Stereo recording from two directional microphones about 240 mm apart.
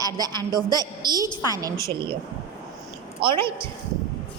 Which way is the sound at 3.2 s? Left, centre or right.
Right.